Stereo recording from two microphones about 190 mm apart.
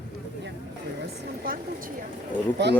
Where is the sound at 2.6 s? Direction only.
65° right (ahead or behind).